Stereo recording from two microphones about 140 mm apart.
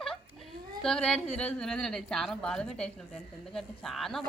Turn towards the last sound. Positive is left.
turn(degrees=0)  # may be behind; listen again after turning